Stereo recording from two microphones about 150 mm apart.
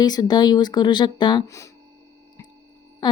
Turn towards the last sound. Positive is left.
turn(degrees=30)  # may be behind; listen again after turning